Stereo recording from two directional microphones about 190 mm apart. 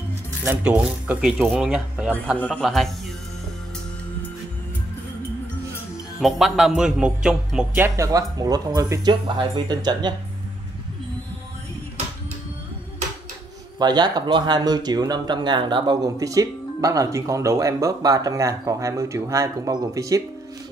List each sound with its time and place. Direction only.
0.5 s speech: 5° right (ahead or behind)
2.3 s speech: 5° left (ahead or behind)
6.2 s speech: centre (ahead or behind); by 10.1 s 20° right (ahead or behind)
13.7 s speech: 20° right (ahead or behind)